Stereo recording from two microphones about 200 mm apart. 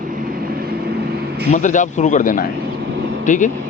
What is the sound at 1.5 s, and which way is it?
A man's voice, 40° left (ahead or behind).